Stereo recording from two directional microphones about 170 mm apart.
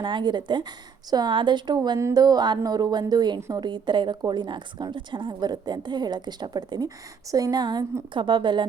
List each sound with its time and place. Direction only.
0.0 s a woman's voice: 25° right (ahead or behind)